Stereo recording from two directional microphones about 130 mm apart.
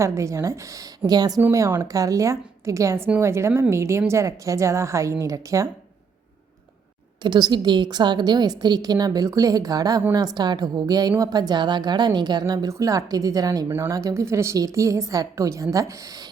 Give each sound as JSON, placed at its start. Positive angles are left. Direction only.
{"t": 0.0, "sound": "a woman's voice", "side_deg": -25}
{"t": 7.2, "sound": "a woman's voice", "side_deg": -35}